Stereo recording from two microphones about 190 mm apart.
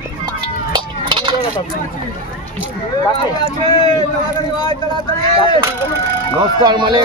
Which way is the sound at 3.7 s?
20° left (ahead or behind).